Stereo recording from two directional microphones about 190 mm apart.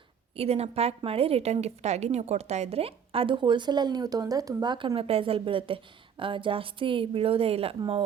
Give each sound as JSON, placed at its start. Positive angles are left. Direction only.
{"t": 0.3, "sound": "a woman's voice", "side_deg": -35}